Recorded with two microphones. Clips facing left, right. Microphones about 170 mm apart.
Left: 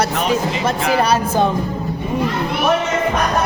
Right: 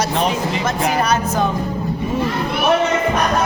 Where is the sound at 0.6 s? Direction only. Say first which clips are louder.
Left 2 dB; 30° left (ahead or behind).